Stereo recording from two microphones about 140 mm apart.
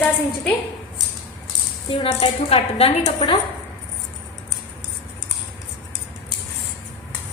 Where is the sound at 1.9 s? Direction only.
40° left (ahead or behind).